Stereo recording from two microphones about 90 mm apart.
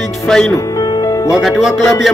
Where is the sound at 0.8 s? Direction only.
45° left (ahead or behind).